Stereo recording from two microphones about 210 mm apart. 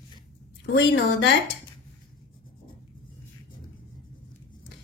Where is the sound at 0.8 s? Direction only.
55° left (ahead or behind).